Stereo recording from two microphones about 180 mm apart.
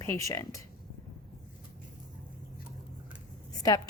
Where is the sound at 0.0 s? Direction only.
15° left (ahead or behind).